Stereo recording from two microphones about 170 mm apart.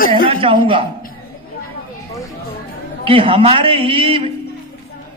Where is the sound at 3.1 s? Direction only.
30° right (ahead or behind).